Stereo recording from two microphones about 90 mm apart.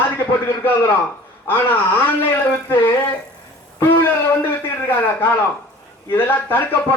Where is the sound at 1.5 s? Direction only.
20° left (ahead or behind).